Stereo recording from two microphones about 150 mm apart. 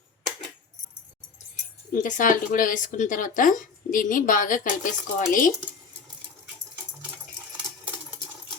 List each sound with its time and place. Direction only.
2.0 s speech: 60° left (ahead or behind)